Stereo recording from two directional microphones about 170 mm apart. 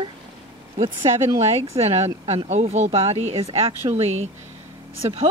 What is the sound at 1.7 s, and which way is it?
Speech, 35° right (ahead or behind).